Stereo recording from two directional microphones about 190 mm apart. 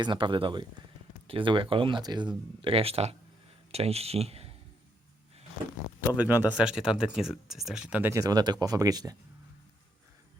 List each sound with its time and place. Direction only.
0.0 s speech: 25° right (ahead or behind)
6.0 s speech: 10° right (ahead or behind)